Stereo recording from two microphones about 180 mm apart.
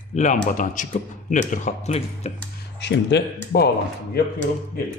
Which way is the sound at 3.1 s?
70° left (ahead or behind).